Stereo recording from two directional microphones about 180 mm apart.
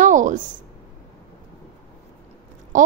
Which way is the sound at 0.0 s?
45° right (ahead or behind).